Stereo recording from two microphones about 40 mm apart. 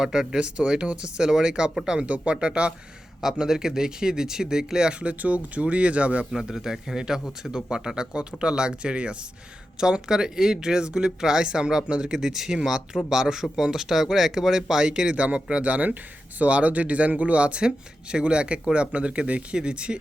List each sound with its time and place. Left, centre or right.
0.0 s speech: centre
2.0 s speech: right
3.2 s speech: centre
4.9 s speech: right
6.3 s speech: centre; by 20.0 s right